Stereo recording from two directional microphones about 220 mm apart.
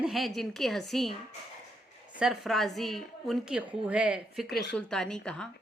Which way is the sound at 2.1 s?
Centre (ahead or behind).